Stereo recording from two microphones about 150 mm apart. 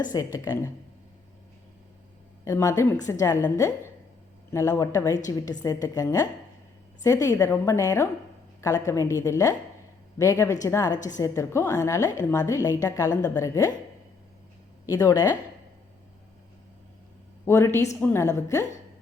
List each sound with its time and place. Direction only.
0.0 s a woman's voice: 25° left (ahead or behind)
2.4 s a woman's voice: 20° left (ahead or behind)
14.8 s a woman's voice: 25° left (ahead or behind)
17.4 s a woman's voice: 15° left (ahead or behind)